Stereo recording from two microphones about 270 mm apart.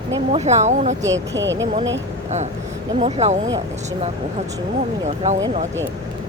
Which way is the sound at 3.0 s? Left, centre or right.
Right.